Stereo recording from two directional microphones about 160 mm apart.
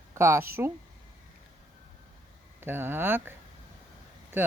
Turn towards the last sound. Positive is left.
turn(degrees=-15)  # may be behind; listen again after turning